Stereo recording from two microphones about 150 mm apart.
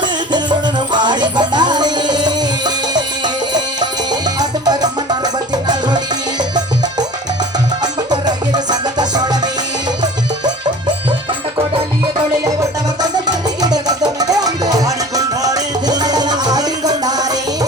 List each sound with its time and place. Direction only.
0.9 s music: 30° right (ahead or behind)
4.4 s music: 25° right (ahead or behind)
8.1 s music: 30° right (ahead or behind)
11.5 s music: 30° right (ahead or behind)